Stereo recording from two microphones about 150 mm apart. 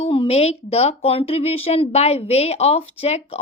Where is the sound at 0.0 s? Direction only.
40° left (ahead or behind).